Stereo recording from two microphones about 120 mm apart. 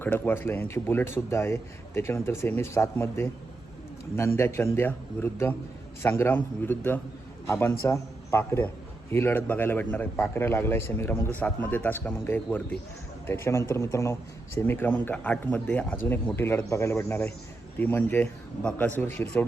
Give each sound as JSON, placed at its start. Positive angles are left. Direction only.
{"t": 0.0, "sound": "a man's voice", "side_deg": 15}